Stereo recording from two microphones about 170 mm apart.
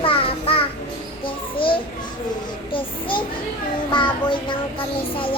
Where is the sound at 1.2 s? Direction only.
30° left (ahead or behind).